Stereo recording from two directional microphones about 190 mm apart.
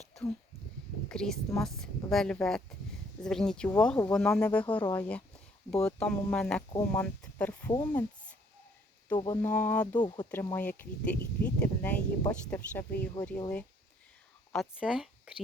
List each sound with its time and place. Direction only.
1.0 s speech: 5° left (ahead or behind)
9.1 s speech: 20° left (ahead or behind)
10.0 s speech: 20° left (ahead or behind)
10.3 s speech: 10° left (ahead or behind)
14.5 s speech: centre (ahead or behind)